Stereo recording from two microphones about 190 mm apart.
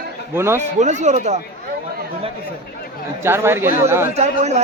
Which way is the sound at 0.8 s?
40° right (ahead or behind).